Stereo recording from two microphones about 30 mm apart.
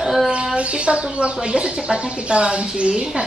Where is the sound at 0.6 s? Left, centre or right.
Right.